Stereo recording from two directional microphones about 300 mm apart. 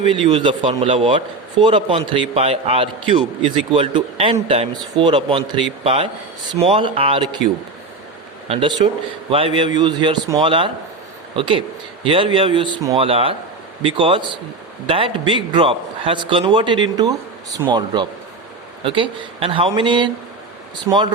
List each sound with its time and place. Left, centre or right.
0.1 s speech: centre
8.4 s speech: centre